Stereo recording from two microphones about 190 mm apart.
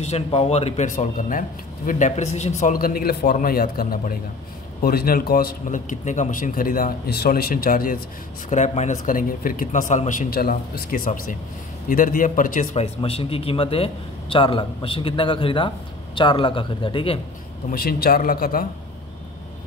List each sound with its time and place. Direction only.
0.0 s a man's voice: 35° left (ahead or behind); by 8.0 s 50° left (ahead or behind)
8.5 s a man's voice: 35° left (ahead or behind)
12.8 s speech: 30° left (ahead or behind)
17.6 s a man's voice: 55° left (ahead or behind)